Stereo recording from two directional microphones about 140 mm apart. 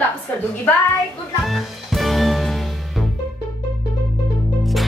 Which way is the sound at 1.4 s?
Centre (ahead or behind).